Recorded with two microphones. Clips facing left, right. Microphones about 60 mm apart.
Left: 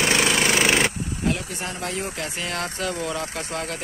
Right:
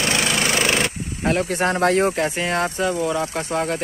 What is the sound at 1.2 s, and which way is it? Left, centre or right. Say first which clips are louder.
Speech: right 8 dB; right.